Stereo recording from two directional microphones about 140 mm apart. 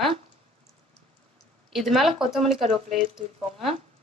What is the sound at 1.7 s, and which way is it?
Speech, centre (ahead or behind).